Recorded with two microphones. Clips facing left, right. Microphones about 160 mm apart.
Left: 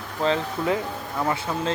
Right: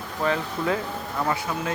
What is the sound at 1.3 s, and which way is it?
Speech, 25° left (ahead or behind).